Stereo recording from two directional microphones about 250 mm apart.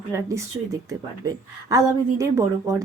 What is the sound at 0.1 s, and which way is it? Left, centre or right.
A woman's voice, centre.